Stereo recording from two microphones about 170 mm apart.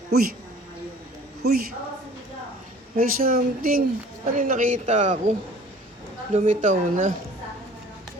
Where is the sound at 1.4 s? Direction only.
70° right (ahead or behind).